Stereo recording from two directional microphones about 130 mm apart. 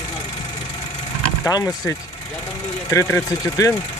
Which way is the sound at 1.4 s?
25° left (ahead or behind).